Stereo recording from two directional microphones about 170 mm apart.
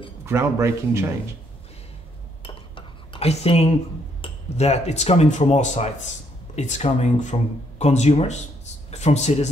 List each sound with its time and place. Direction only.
0.2 s a man's voice: 15° right (ahead or behind)
2.4 s cutlery: 30° left (ahead or behind)
4.2 s speech: 40° left (ahead or behind)